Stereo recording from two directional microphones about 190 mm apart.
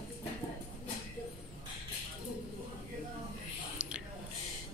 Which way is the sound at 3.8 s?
5° right (ahead or behind).